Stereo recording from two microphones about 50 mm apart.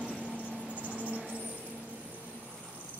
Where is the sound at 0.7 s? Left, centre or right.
Right.